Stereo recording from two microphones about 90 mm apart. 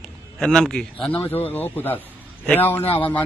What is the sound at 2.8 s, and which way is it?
Speech, 90° left.